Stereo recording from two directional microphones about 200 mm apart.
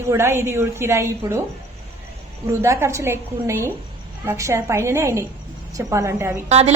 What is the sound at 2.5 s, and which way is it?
A woman's voice, 15° right (ahead or behind).